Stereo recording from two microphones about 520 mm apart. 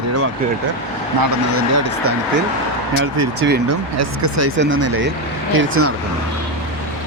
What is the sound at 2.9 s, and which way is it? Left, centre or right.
Speech, right.